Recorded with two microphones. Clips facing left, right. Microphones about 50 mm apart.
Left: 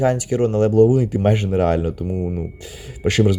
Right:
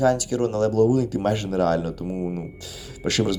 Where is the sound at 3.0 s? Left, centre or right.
Left.